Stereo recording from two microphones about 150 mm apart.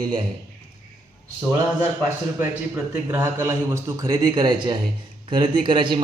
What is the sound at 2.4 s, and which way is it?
A man's voice, 15° right (ahead or behind).